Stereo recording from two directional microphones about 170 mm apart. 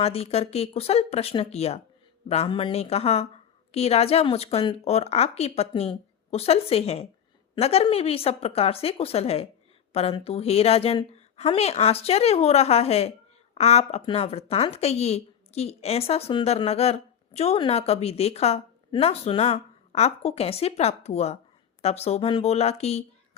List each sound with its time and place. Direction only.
0.0 s a woman's voice: 35° left (ahead or behind)